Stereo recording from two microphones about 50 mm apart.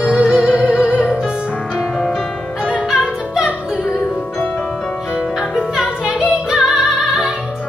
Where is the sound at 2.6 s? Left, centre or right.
Centre.